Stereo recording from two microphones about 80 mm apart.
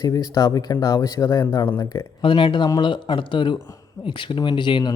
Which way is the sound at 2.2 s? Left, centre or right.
Left.